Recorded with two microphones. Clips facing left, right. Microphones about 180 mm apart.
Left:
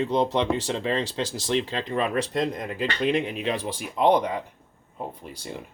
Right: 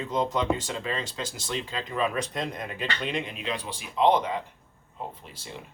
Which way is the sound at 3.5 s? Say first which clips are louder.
Left 2 dB; 50° left (ahead or behind).